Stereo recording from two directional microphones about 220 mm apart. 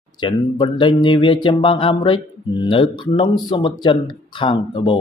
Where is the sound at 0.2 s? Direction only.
20° left (ahead or behind).